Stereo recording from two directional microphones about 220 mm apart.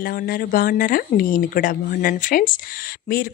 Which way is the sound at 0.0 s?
40° left (ahead or behind).